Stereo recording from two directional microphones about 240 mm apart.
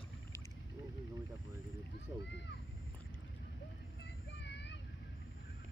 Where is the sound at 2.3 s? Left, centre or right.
Left.